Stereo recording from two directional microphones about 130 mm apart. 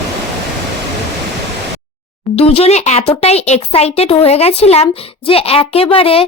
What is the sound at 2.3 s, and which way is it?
Speech, 50° left (ahead or behind).